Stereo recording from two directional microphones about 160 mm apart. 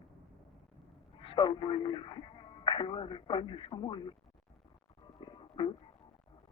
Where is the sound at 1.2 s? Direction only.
30° left (ahead or behind).